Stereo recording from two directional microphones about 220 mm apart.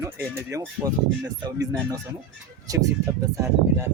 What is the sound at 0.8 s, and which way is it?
Speech, 15° right (ahead or behind).